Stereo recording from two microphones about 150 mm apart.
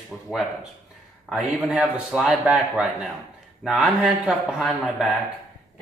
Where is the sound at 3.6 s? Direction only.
5° left (ahead or behind).